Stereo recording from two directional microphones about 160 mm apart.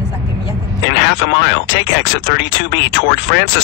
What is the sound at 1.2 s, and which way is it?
Speech, 90° left.